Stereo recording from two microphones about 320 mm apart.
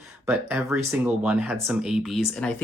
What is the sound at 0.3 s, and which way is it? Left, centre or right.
Speech, centre.